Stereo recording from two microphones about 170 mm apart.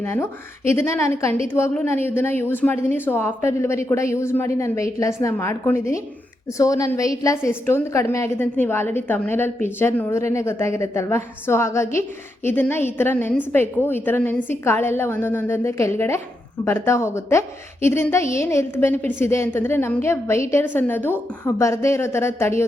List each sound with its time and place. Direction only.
0.0 s a woman's voice: 15° left (ahead or behind)